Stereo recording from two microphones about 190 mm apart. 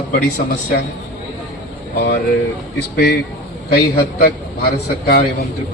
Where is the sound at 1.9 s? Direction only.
55° left (ahead or behind).